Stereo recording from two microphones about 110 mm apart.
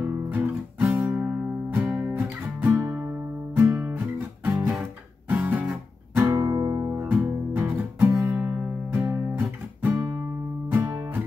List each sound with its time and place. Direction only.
0.0 s music: 15° right (ahead or behind)
5.3 s music: 15° right (ahead or behind)
10.8 s music: 35° right (ahead or behind)